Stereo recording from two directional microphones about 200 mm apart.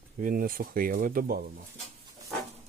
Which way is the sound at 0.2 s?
45° right (ahead or behind).